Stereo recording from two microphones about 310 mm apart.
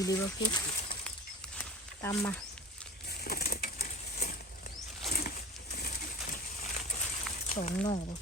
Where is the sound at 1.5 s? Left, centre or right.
Centre.